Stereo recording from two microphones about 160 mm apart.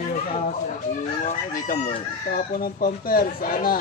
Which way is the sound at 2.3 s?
65° left (ahead or behind).